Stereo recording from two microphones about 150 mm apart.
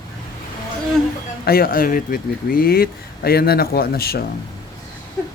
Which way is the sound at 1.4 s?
85° left.